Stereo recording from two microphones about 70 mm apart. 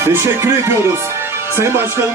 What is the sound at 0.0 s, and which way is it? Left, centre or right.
Speech, right.